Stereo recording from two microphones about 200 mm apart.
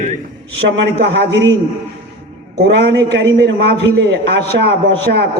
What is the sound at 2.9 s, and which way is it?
A man's voice, 60° right (ahead or behind).